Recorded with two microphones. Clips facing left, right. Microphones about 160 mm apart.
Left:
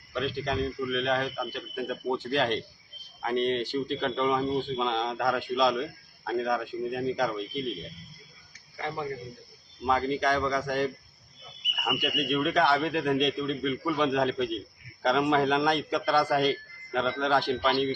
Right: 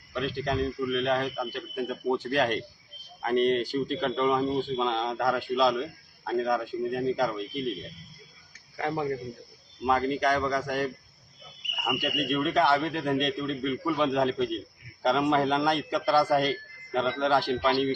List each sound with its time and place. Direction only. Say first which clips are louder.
0.1 s a man's voice: right 1 dB; centre (ahead or behind)
3.3 s speech: right 3 dB; 45° right (ahead or behind)
3.7 s a man's voice: right 1 dB; centre (ahead or behind)
8.7 s speech: right 4 dB; 45° right (ahead or behind)
9.8 s a man's voice: right 1 dB; centre (ahead or behind)
12.0 s a man's voice: even; centre (ahead or behind)